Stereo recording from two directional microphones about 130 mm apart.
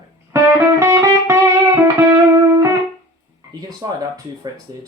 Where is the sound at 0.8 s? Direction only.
20° right (ahead or behind).